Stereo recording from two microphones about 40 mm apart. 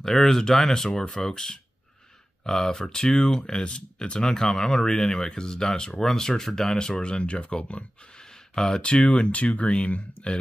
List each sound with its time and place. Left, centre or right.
0.0 s speech: centre; by 10.4 s left